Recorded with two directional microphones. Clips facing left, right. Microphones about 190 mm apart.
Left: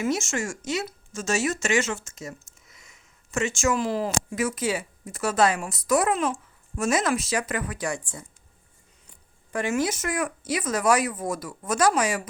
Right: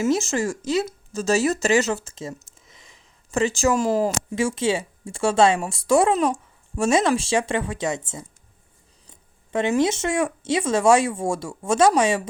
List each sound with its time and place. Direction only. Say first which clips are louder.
0.0 s speech: right 5 dB; 35° right (ahead or behind)
4.4 s speech: right 5 dB; 25° right (ahead or behind)
9.5 s speech: right 5 dB; 25° right (ahead or behind)